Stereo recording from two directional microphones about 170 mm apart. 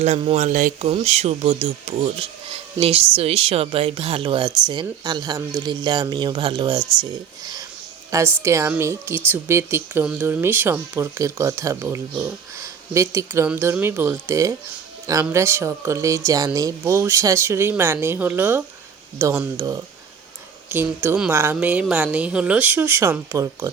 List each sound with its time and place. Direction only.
0.0 s speech: 40° right (ahead or behind)
0.9 s a woman's voice: 35° right (ahead or behind); by 19.6 s 15° right (ahead or behind)
20.7 s speech: 15° right (ahead or behind)